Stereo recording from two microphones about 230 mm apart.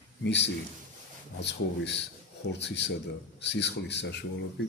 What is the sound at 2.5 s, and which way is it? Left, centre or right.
A man's voice, left.